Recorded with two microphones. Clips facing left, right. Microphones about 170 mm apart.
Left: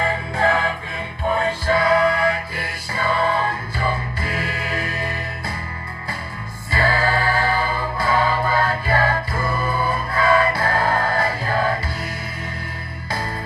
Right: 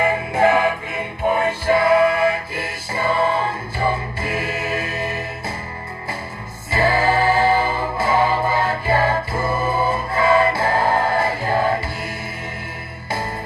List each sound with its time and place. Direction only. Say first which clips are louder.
0.0 s music: right 4 dB; 20° right (ahead or behind)
6.7 s music: right 3 dB; 20° right (ahead or behind)